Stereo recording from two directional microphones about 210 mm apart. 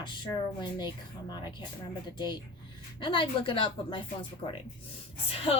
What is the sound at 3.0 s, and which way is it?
Speech, 25° left (ahead or behind).